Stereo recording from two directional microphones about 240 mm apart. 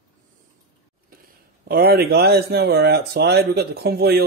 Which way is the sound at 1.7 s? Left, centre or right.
Right.